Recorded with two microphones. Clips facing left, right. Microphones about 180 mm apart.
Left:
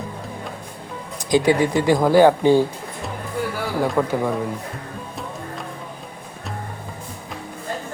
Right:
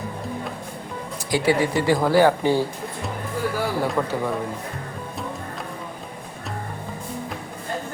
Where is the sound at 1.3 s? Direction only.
20° left (ahead or behind).